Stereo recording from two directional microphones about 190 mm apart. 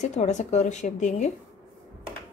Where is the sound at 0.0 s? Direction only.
40° left (ahead or behind).